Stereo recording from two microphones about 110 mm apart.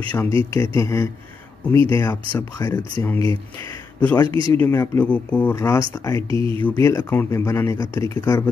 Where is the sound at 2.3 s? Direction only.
35° left (ahead or behind).